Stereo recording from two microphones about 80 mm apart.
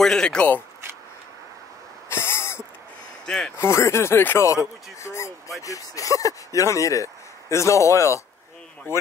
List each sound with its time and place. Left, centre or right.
0.0 s speech: centre
2.0 s a sound: left
3.3 s speech: centre
3.5 s speech: left